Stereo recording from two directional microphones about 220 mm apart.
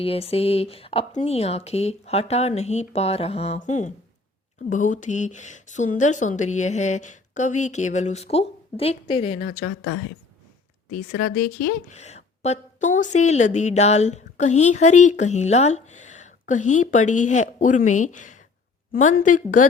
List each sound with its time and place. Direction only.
0.0 s a woman's voice: 25° left (ahead or behind)
9.6 s speech: 85° left
10.9 s speech: 45° left (ahead or behind)
11.4 s a woman's voice: 30° left (ahead or behind)